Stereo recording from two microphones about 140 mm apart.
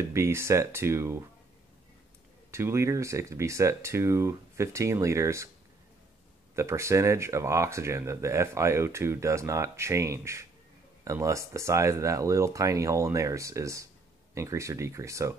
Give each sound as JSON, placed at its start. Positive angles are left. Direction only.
{"t": 0.0, "sound": "speech", "side_deg": -20}
{"t": 2.5, "sound": "speech", "side_deg": -20}
{"t": 6.5, "sound": "speech", "side_deg": -20}